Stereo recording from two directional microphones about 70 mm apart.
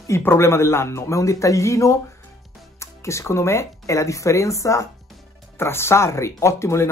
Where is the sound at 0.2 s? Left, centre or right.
Left.